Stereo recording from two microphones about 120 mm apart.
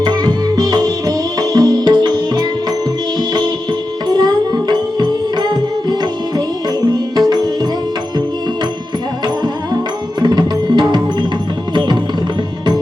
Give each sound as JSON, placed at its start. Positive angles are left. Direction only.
{"t": 0.0, "sound": "music", "side_deg": -35}
{"t": 4.1, "sound": "music", "side_deg": -35}
{"t": 10.2, "sound": "music", "side_deg": -35}